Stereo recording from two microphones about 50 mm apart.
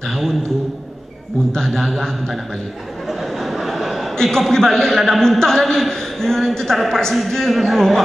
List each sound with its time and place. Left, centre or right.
1.5 s a man's voice: centre
3.1 s chuckle: centre
5.2 s a woman's voice: centre